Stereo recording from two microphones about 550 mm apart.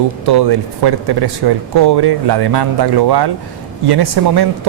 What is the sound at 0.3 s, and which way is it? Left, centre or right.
Speech, right.